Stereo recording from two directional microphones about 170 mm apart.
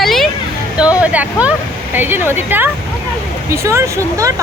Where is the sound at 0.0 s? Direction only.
Centre (ahead or behind).